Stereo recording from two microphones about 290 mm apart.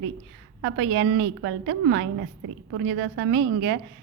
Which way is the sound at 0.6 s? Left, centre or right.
Right.